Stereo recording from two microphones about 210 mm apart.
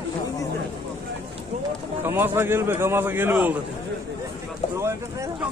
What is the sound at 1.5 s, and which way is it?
Run, 30° right (ahead or behind).